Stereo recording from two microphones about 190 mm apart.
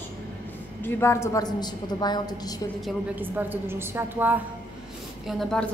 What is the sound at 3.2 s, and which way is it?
A woman's voice, 10° right (ahead or behind).